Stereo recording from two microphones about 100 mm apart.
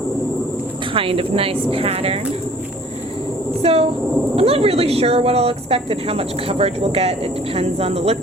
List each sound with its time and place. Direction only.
0.9 s a woman's voice: 65° right (ahead or behind)
3.6 s speech: 75° right (ahead or behind)